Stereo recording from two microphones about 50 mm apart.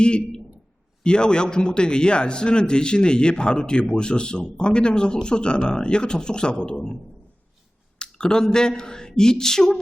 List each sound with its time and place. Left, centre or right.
0.0 s a man's voice: centre
7.9 s a sound: centre
8.5 s a man's voice: centre